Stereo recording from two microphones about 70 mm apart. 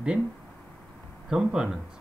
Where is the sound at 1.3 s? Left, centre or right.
Centre.